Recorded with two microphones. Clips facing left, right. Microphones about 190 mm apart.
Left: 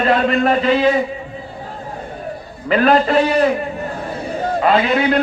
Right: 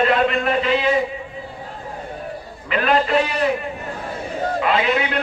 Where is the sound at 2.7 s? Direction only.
40° left (ahead or behind).